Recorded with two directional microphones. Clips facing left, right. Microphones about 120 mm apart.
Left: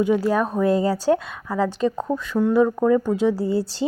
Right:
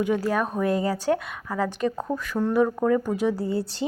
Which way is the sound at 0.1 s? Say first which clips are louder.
Left 4 dB; 25° left (ahead or behind).